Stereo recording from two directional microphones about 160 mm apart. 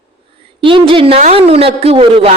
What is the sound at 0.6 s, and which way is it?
A woman's voice, 35° right (ahead or behind).